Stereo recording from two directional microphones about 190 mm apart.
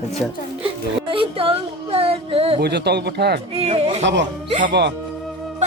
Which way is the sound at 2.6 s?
60° right (ahead or behind).